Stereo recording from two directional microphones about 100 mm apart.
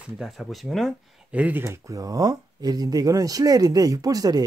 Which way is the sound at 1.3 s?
15° right (ahead or behind).